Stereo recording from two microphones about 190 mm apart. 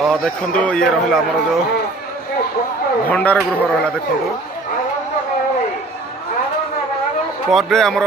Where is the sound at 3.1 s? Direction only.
5° left (ahead or behind).